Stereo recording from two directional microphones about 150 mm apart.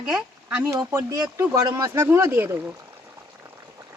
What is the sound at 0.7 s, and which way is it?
Speech, 20° right (ahead or behind).